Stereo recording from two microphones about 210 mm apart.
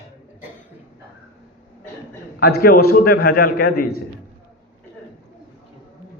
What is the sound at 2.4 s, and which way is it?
A man's voice, 45° left (ahead or behind).